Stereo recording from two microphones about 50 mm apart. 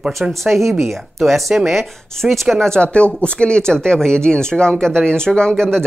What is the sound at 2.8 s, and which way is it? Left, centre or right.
Speech, left.